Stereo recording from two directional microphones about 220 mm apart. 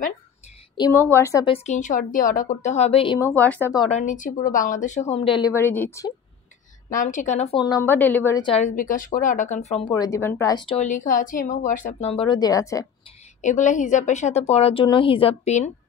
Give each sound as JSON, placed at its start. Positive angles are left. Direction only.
{"t": 0.7, "sound": "a woman's voice", "side_deg": 15}
{"t": 3.2, "sound": "a woman's voice", "side_deg": 10}
{"t": 3.7, "sound": "speech", "side_deg": 20}
{"t": 4.0, "sound": "a woman's voice", "side_deg": 35}
{"t": 5.5, "sound": "a woman's voice", "side_deg": 10}
{"t": 6.9, "sound": "a woman's voice", "side_deg": 35}
{"t": 7.6, "sound": "a woman's voice", "side_deg": 15}
{"t": 8.5, "sound": "speech", "side_deg": 30}
{"t": 10.8, "sound": "a woman's voice", "side_deg": 35}
{"t": 13.4, "sound": "speech", "side_deg": 35}